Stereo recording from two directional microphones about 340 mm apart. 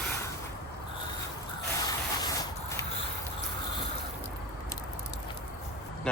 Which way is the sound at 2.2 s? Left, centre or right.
Centre.